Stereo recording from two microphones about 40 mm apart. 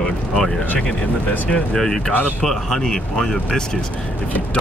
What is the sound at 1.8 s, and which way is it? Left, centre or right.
Speech, centre.